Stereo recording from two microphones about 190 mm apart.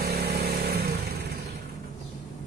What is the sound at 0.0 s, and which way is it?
Vehicle, 55° right (ahead or behind).